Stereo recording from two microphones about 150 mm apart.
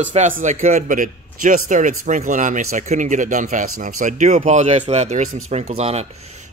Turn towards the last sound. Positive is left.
turn(degrees=-45)  # may be behind; listen again after turning